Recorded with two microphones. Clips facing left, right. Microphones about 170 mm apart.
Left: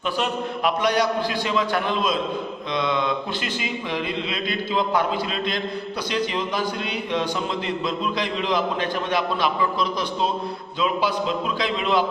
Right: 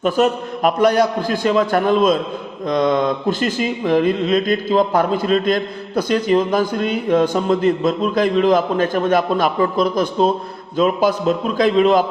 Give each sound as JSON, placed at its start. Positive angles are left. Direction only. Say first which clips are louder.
{"t": 0.0, "sound": "speech", "louder": "right 8 dB", "side_deg": -45}